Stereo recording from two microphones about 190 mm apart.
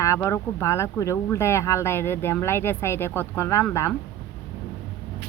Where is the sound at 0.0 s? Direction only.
15° left (ahead or behind).